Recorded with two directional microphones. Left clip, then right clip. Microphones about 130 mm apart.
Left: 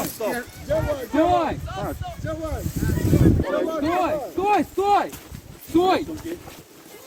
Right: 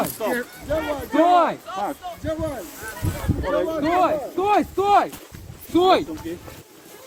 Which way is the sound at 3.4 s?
15° right (ahead or behind).